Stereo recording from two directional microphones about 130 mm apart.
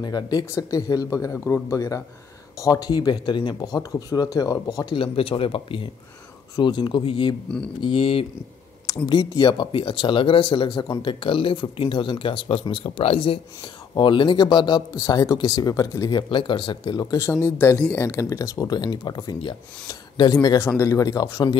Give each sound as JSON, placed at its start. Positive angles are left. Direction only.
{"t": 0.0, "sound": "speech", "side_deg": 30}
{"t": 8.8, "sound": "speech", "side_deg": 35}
{"t": 17.3, "sound": "speech", "side_deg": 15}
{"t": 20.5, "sound": "speech", "side_deg": 20}